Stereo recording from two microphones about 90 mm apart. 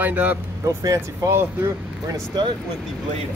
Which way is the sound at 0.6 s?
40° right (ahead or behind).